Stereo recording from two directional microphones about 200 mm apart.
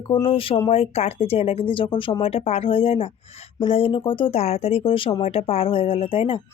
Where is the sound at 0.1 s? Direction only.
25° left (ahead or behind).